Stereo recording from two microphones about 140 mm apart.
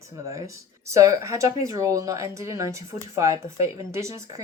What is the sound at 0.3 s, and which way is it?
Speech, 20° right (ahead or behind).